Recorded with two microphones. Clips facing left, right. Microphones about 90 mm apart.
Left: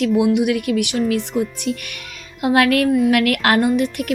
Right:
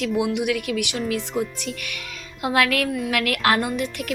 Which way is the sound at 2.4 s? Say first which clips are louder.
Left 6 dB; 50° left (ahead or behind).